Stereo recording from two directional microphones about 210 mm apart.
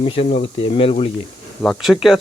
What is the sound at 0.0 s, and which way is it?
Speech, 25° left (ahead or behind).